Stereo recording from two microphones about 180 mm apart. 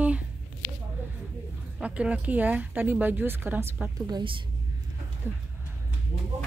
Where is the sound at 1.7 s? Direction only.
5° right (ahead or behind).